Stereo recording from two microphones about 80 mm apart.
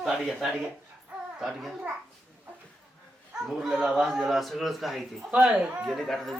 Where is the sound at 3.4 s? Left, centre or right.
Centre.